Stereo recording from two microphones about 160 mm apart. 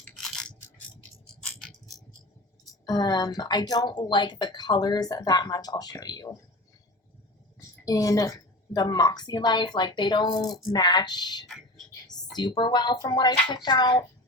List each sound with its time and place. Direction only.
0.0 s a sound: 5° left (ahead or behind)
2.8 s speech: 25° left (ahead or behind)
7.9 s speech: 20° left (ahead or behind)